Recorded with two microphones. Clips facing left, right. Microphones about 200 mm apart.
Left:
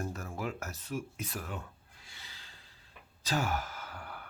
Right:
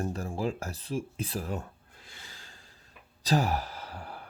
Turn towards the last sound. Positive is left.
turn(degrees=-30)  # may be behind; listen again after turning